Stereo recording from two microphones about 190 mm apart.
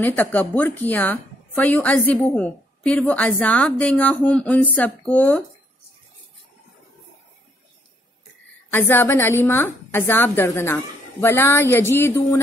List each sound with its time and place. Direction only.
0.0 s a woman's voice: 10° left (ahead or behind)
8.6 s a woman's voice: 10° left (ahead or behind)